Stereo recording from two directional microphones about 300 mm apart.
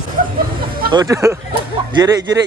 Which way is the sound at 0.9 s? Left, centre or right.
Centre.